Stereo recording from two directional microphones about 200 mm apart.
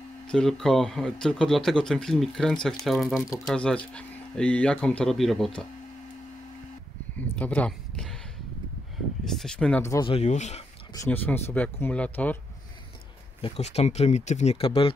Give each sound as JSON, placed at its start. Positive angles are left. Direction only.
{"t": 0.3, "sound": "speech", "side_deg": 5}
{"t": 7.2, "sound": "a sound", "side_deg": 5}
{"t": 9.2, "sound": "speech", "side_deg": 0}
{"t": 10.0, "sound": "speech", "side_deg": 30}
{"t": 11.1, "sound": "speech", "side_deg": 10}
{"t": 13.4, "sound": "speech", "side_deg": 35}